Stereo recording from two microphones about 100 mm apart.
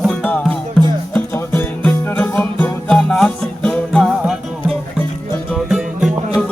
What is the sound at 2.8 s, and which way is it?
Music, 10° left (ahead or behind).